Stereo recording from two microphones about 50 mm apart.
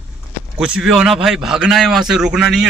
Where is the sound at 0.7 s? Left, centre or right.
Centre.